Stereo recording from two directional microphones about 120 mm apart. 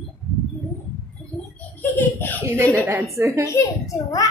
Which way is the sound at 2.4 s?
25° right (ahead or behind).